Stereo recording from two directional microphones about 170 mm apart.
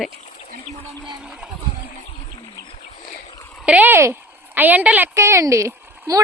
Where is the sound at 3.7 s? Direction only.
10° right (ahead or behind).